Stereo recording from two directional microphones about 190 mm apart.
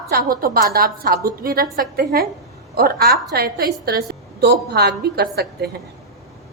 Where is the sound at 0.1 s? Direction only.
50° right (ahead or behind).